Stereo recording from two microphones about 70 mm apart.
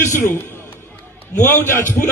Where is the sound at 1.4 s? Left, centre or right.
Left.